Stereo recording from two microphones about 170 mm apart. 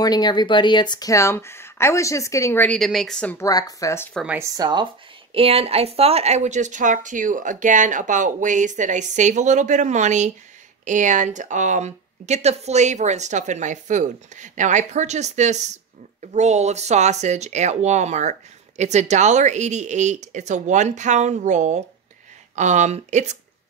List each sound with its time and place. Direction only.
0.0 s speech: 25° left (ahead or behind); by 3.4 s 5° left (ahead or behind)
3.4 s speech: 20° left (ahead or behind)
4.1 s speech: centre (ahead or behind)
4.4 s speech: 20° right (ahead or behind)
5.3 s speech: 35° right (ahead or behind)